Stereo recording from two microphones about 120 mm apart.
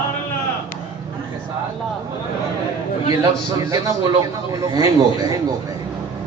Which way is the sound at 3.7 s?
30° right (ahead or behind).